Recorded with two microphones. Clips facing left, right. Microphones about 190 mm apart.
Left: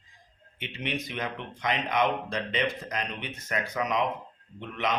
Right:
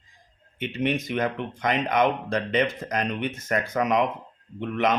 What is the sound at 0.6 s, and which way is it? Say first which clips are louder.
Speech: right 8 dB; 45° right (ahead or behind).